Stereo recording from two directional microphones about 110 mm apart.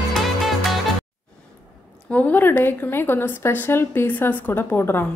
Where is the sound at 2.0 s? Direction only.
15° left (ahead or behind).